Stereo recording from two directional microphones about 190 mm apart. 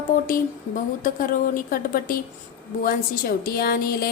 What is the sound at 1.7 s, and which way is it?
A woman's voice, 45° left (ahead or behind).